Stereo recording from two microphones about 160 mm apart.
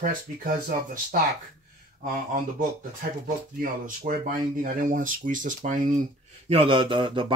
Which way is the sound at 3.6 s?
55° right (ahead or behind).